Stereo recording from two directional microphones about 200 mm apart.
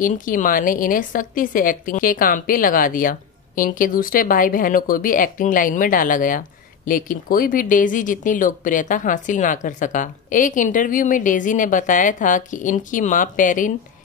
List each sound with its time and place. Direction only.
0.0 s a woman's voice: 40° left (ahead or behind)